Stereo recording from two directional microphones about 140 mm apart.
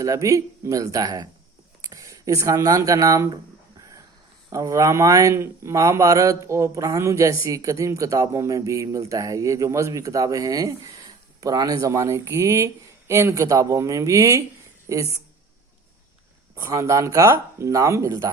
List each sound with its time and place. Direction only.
0.0 s speech: 25° right (ahead or behind)
3.8 s a sound: 25° right (ahead or behind)
4.4 s speech: 25° right (ahead or behind)
16.6 s speech: 20° right (ahead or behind)